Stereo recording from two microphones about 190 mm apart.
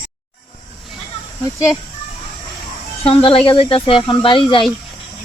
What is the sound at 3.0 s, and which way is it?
Speech, 25° left (ahead or behind).